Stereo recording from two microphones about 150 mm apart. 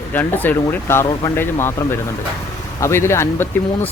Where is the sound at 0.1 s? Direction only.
15° left (ahead or behind).